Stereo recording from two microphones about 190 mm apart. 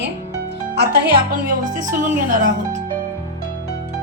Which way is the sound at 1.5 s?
45° right (ahead or behind).